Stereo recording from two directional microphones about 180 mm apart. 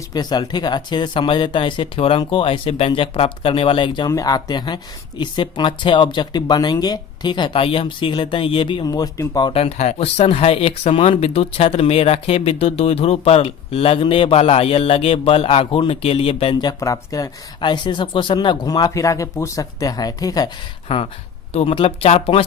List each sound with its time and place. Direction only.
0.1 s speech: 25° left (ahead or behind)
20.8 s speech: 30° left (ahead or behind)